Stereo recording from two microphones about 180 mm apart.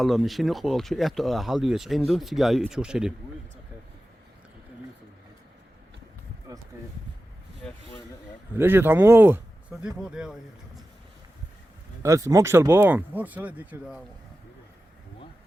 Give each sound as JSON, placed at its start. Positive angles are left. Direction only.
{"t": 0.0, "sound": "speech", "side_deg": 0}
{"t": 8.5, "sound": "speech", "side_deg": -10}
{"t": 12.0, "sound": "speech", "side_deg": -15}